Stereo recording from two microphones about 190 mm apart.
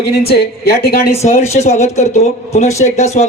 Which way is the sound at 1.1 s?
35° left (ahead or behind).